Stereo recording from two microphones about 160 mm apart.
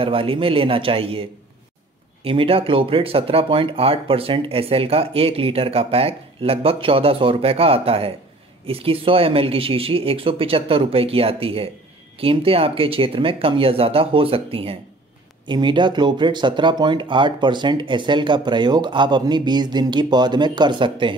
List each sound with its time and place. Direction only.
0.0 s speech: 35° right (ahead or behind)
2.2 s speech: 35° right (ahead or behind)